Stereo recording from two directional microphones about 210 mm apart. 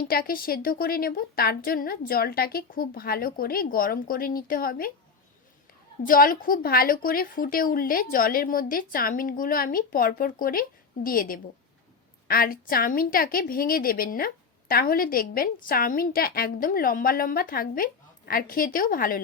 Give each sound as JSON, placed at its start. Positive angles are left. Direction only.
{"t": 0.0, "sound": "a woman's voice", "side_deg": 45}
{"t": 6.0, "sound": "a woman's voice", "side_deg": 40}